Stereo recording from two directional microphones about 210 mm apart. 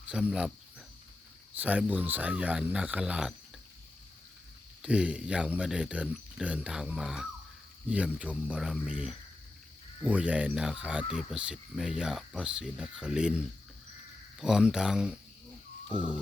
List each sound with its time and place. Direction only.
0.1 s cricket: 5° right (ahead or behind)
1.5 s speech: 5° right (ahead or behind)
4.8 s speech: 5° right (ahead or behind)